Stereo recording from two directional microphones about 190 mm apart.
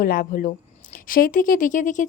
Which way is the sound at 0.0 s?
50° left (ahead or behind).